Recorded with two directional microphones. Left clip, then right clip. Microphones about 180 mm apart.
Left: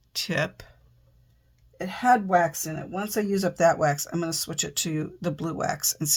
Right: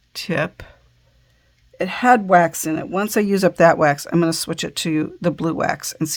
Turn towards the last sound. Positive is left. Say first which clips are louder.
# right 6 dB
turn(degrees=-30)  # may be behind; listen again after turning